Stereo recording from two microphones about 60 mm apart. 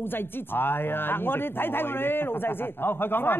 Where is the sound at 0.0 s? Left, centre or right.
Left.